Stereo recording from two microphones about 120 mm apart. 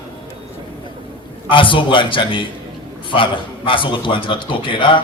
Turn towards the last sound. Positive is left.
turn(degrees=45)  # may be behind; listen again after turning